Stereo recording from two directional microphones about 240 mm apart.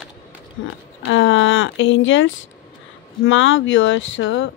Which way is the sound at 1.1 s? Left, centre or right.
Left.